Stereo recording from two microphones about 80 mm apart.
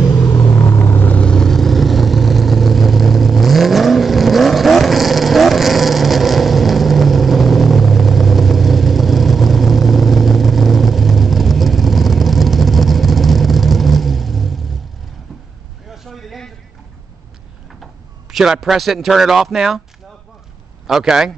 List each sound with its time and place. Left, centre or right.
0.0 s rumble: left
0.9 s vehicle: centre
15.9 s vehicle: centre
18.3 s speech: centre
20.8 s speech: centre